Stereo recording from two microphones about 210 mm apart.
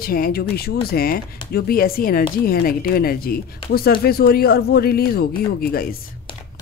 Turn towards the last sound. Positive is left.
turn(degrees=45)  # may be behind; listen again after turning